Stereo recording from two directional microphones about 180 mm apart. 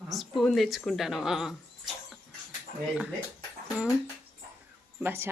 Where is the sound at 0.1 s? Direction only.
Centre (ahead or behind).